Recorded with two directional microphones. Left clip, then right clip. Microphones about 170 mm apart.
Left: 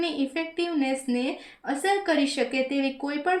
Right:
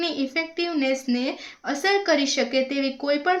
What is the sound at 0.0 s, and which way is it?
Speech, 35° right (ahead or behind).